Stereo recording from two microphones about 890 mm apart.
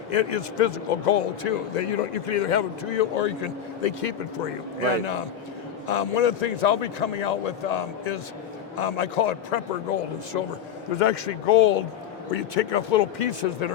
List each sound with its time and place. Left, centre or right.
0.1 s a man's voice: left